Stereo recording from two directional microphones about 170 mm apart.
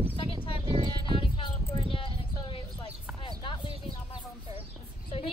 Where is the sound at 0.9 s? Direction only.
30° left (ahead or behind).